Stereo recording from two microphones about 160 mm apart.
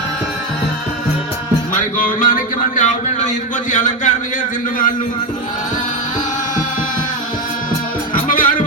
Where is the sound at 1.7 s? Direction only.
55° left (ahead or behind).